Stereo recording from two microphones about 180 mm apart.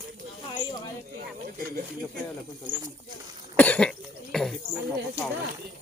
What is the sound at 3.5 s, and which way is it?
Cough, 10° left (ahead or behind).